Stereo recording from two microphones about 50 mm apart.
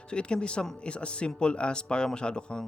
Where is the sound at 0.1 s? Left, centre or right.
Centre.